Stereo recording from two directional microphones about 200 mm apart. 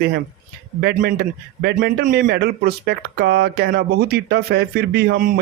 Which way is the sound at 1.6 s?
60° right (ahead or behind).